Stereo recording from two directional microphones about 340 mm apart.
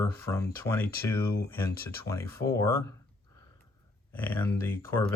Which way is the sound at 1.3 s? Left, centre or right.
Left.